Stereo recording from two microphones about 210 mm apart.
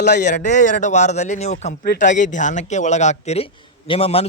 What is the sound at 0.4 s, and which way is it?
A man's voice, 35° left (ahead or behind).